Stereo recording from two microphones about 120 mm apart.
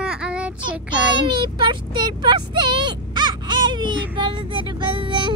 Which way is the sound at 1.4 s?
40° right (ahead or behind).